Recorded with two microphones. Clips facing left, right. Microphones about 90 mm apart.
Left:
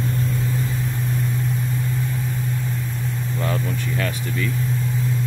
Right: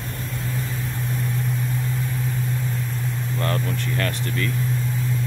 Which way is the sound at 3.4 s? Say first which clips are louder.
Even; 5° left (ahead or behind).